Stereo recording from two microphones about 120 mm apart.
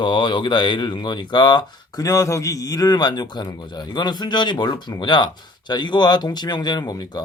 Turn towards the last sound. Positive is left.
turn(degrees=35)  # may be behind; listen again after turning